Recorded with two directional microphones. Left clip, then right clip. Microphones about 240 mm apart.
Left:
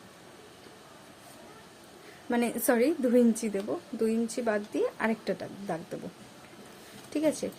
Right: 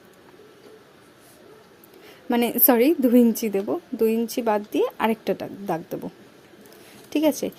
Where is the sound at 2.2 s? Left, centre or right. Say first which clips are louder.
Right 7 dB; right.